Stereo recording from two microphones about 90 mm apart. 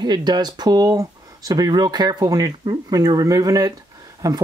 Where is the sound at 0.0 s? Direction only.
50° right (ahead or behind).